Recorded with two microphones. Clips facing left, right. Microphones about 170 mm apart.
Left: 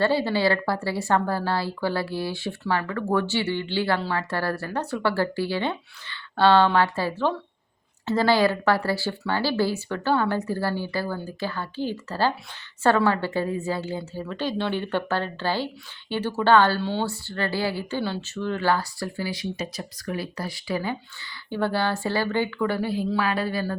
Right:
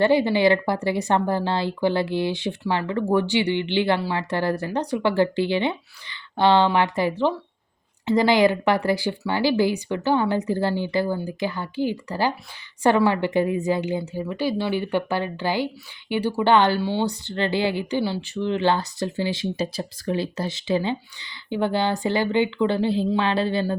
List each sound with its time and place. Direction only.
0.0 s speech: 15° right (ahead or behind)